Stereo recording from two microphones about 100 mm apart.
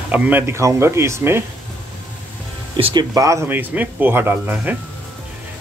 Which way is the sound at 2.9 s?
35° right (ahead or behind).